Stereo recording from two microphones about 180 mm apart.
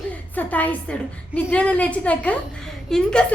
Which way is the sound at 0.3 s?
10° left (ahead or behind).